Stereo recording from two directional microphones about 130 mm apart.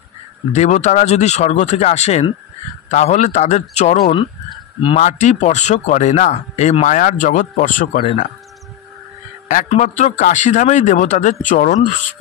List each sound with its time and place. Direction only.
0.5 s speech: 65° left (ahead or behind); by 8.1 s 90° left
9.7 s speech: 60° left (ahead or behind)